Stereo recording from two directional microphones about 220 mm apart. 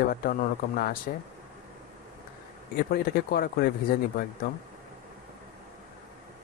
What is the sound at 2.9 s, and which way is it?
Speech, 45° left (ahead or behind).